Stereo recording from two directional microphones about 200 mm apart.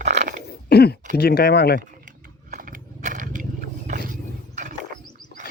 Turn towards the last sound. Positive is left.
turn(degrees=-40)  # may be behind; listen again after turning